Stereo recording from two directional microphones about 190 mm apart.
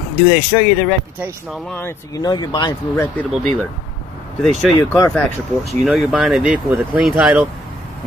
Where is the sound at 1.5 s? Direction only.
10° left (ahead or behind).